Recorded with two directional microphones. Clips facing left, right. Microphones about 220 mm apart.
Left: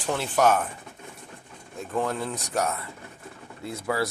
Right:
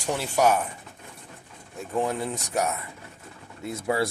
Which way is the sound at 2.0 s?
15° right (ahead or behind).